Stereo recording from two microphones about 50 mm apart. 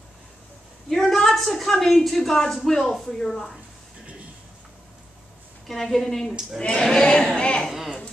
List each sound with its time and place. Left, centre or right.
0.8 s a woman's voice: centre
5.7 s a woman's voice: centre
7.3 s a woman's voice: centre